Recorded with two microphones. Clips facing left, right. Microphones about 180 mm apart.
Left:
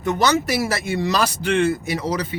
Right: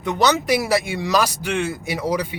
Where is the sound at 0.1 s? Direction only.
15° right (ahead or behind).